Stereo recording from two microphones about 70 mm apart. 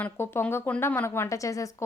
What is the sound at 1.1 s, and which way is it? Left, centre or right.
Speech, left.